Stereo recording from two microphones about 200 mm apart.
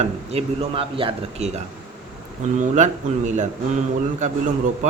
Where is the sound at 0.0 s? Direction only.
30° right (ahead or behind).